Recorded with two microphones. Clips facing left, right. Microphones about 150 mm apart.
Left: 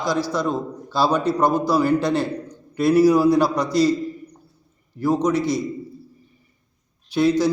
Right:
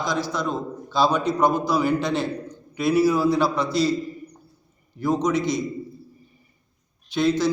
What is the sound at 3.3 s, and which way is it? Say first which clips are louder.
Speech: left 3 dB; 45° left (ahead or behind).